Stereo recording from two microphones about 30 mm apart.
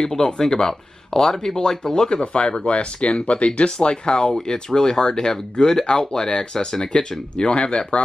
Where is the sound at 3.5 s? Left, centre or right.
Left.